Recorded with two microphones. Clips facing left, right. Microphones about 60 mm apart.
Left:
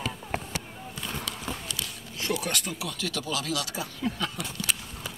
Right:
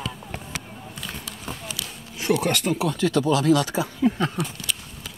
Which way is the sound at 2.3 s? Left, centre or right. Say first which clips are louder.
Right 9 dB; right.